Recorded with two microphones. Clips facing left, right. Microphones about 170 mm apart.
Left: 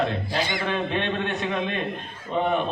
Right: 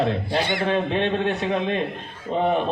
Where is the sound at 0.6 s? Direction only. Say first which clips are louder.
Right 4 dB; 35° right (ahead or behind).